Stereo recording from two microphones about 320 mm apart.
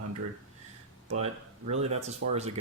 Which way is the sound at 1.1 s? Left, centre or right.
Centre.